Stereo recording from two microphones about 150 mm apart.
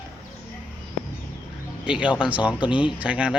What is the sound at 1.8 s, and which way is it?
Speech, 5° right (ahead or behind).